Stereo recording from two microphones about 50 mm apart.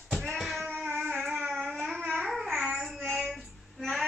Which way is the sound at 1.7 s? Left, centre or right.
Centre.